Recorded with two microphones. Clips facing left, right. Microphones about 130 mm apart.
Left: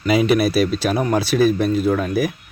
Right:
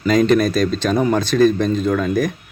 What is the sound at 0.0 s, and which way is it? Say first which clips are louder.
Speech: right 2 dB; 10° left (ahead or behind).